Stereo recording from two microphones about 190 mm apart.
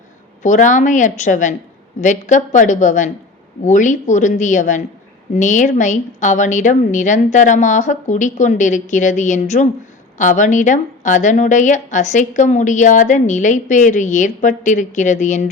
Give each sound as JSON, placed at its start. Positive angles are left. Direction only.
{"t": 0.4, "sound": "a woman's voice", "side_deg": 40}